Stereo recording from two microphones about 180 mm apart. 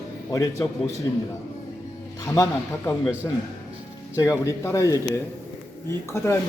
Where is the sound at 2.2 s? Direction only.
20° left (ahead or behind).